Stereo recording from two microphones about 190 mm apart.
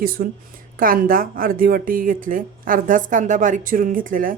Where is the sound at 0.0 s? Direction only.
50° right (ahead or behind).